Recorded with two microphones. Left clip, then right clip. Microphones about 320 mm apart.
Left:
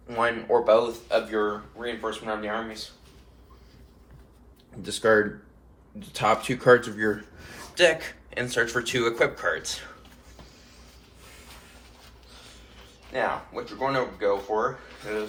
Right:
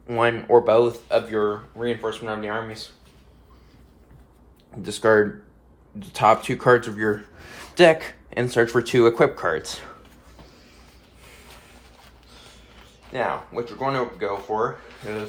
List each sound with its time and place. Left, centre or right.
0.2 s speech: right
4.8 s speech: centre
13.1 s speech: right